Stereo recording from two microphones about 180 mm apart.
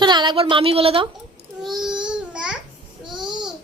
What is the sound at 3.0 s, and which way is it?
Babbling, 25° right (ahead or behind).